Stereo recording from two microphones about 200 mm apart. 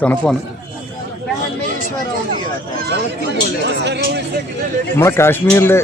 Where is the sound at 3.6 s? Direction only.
60° right (ahead or behind).